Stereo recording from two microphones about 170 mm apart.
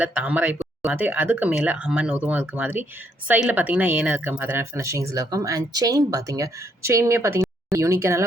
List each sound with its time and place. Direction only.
0.0 s speech: 10° right (ahead or behind)